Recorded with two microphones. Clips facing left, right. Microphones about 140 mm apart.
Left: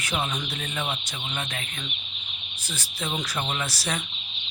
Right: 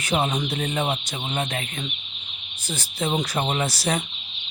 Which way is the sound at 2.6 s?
25° right (ahead or behind).